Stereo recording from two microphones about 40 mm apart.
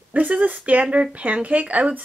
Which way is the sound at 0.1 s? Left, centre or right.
Right.